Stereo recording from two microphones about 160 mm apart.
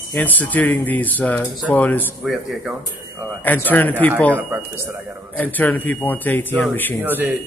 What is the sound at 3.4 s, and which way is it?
Speech, 10° left (ahead or behind).